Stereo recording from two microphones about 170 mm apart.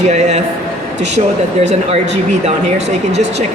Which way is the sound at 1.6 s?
40° right (ahead or behind).